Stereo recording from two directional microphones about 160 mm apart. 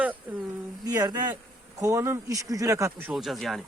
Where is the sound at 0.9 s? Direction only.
25° right (ahead or behind).